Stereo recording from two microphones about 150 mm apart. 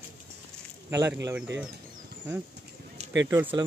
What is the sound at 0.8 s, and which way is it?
Speech, 15° right (ahead or behind).